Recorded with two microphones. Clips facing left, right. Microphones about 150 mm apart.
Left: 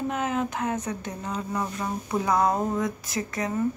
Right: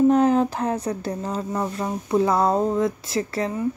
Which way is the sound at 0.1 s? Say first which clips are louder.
Right 10 dB; 35° right (ahead or behind).